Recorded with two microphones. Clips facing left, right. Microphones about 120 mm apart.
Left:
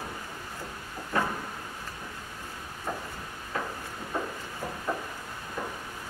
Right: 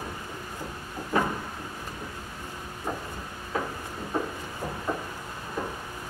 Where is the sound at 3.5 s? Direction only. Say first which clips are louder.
Right 3 dB; 10° right (ahead or behind).